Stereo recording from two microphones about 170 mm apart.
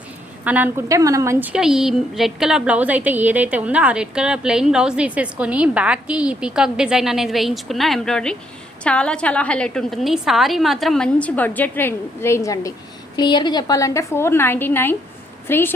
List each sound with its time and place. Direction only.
0.4 s a woman's voice: 10° right (ahead or behind); by 15.7 s 10° left (ahead or behind)